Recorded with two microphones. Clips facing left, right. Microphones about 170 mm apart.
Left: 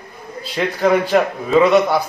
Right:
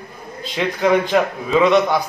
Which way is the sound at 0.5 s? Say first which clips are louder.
Left 1 dB; 5° left (ahead or behind).